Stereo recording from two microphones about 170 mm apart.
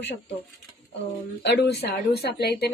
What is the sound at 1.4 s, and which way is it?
Speech, 90° left.